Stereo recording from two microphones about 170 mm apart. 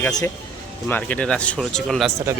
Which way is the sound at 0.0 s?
20° left (ahead or behind).